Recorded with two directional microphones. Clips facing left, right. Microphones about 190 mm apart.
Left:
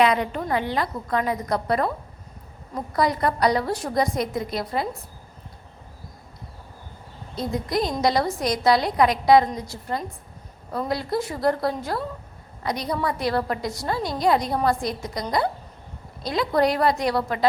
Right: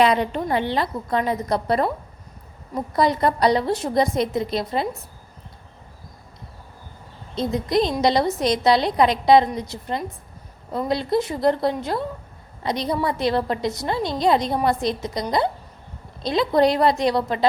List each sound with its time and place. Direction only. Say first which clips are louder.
0.0 s a woman's voice: right 2 dB; 30° right (ahead or behind)
2.9 s a woman's voice: right 3 dB; 25° right (ahead or behind)
7.3 s a woman's voice: right 4 dB; 25° right (ahead or behind)